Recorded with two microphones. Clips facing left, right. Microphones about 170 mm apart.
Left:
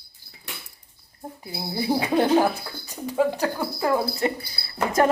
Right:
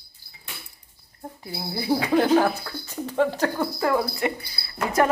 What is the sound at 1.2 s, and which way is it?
Speech, 20° left (ahead or behind).